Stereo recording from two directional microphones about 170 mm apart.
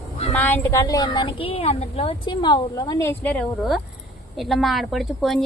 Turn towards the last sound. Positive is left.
turn(degrees=0)  # may be behind; listen again after turning